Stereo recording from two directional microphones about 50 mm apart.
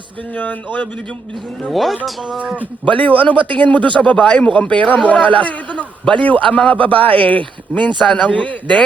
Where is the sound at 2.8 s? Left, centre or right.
Left.